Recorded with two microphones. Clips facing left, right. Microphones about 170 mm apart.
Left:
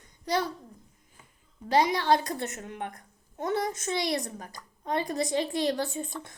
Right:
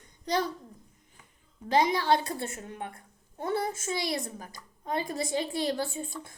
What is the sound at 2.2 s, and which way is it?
A woman's voice, 30° right (ahead or behind).